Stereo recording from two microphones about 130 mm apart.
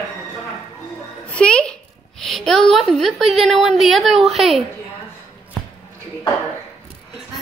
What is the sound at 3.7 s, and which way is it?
Speech, centre (ahead or behind).